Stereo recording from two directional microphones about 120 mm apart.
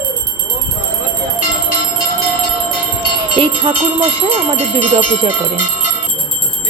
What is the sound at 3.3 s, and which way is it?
Speech, 45° right (ahead or behind).